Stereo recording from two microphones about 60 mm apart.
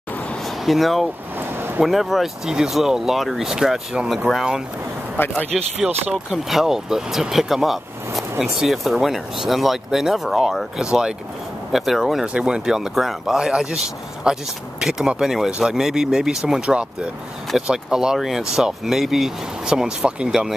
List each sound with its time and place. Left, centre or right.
0.7 s speech: centre
1.4 s a sound: right
1.8 s speech: centre